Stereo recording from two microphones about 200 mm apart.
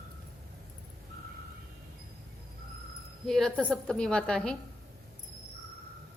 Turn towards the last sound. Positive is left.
turn(degrees=5)  # may be behind; listen again after turning